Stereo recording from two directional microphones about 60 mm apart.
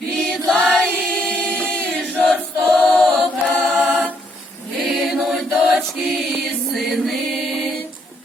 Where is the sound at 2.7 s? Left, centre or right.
Centre.